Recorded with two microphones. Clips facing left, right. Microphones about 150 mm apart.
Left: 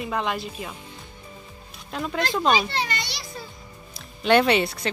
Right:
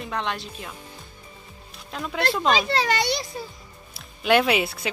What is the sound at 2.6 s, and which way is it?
Speech, 90° right.